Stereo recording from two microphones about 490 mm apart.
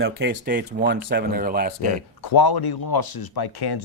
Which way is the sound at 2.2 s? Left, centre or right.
Left.